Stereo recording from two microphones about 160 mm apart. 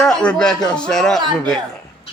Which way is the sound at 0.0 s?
5° left (ahead or behind).